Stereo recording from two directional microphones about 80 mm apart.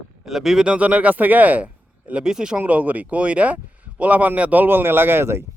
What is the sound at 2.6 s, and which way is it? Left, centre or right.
Speech, centre.